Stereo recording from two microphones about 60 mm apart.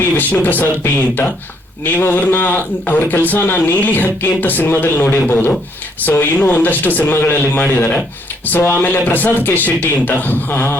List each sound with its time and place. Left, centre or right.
0.0 s speech: left